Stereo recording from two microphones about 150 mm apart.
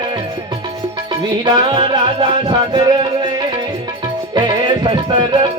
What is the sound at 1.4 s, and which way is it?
Music, 35° right (ahead or behind).